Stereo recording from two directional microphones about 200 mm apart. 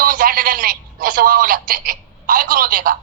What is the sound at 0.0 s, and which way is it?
Speech, 45° right (ahead or behind).